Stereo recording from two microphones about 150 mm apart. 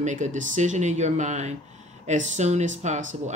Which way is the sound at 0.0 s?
55° right (ahead or behind).